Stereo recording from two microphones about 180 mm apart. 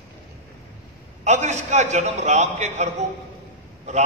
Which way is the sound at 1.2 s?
40° right (ahead or behind).